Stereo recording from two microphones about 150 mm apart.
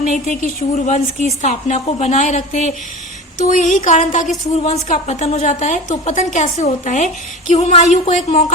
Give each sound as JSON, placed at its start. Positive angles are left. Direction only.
{"t": 0.0, "sound": "a woman's voice", "side_deg": 55}
{"t": 3.3, "sound": "a sound", "side_deg": 60}
{"t": 4.5, "sound": "a woman's voice", "side_deg": 45}